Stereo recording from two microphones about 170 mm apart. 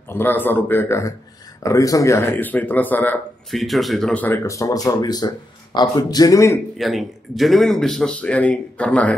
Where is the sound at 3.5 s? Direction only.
Centre (ahead or behind); by 6.6 s 20° left (ahead or behind).